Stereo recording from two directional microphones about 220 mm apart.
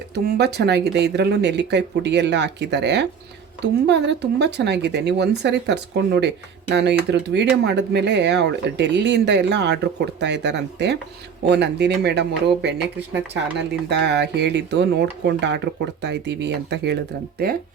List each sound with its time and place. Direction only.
0.1 s speech: 50° right (ahead or behind)
13.8 s speech: 50° right (ahead or behind)